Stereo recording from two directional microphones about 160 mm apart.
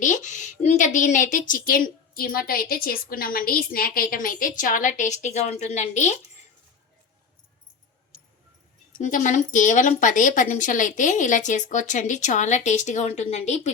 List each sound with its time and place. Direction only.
0.0 s a woman's voice: 50° left (ahead or behind)
8.9 s a woman's voice: 55° left (ahead or behind)